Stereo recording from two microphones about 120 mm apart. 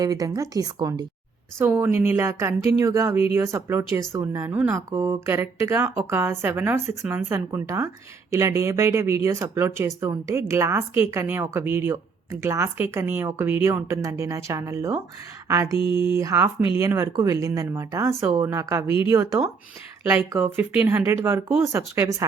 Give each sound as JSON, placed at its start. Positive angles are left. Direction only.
{"t": 0.0, "sound": "speech", "side_deg": -30}
{"t": 1.5, "sound": "a woman's voice", "side_deg": -20}
{"t": 18.9, "sound": "speech", "side_deg": 45}
{"t": 19.1, "sound": "a woman's voice", "side_deg": -25}
{"t": 20.1, "sound": "a woman's voice", "side_deg": -15}